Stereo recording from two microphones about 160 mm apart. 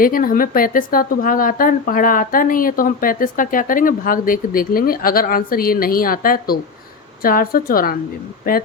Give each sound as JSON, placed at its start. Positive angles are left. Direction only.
{"t": 0.0, "sound": "speech", "side_deg": 60}